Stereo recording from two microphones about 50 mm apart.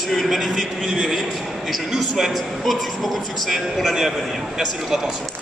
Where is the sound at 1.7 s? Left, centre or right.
Centre.